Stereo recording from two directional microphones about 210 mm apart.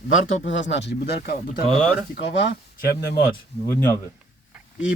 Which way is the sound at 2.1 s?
55° left (ahead or behind).